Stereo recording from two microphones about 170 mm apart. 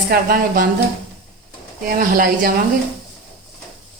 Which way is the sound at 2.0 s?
55° right (ahead or behind).